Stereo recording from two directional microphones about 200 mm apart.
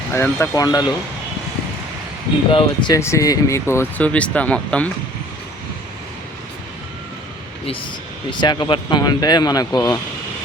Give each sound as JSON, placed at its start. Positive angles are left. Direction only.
{"t": 0.1, "sound": "speech", "side_deg": 10}
{"t": 2.5, "sound": "speech", "side_deg": 25}
{"t": 8.3, "sound": "speech", "side_deg": 20}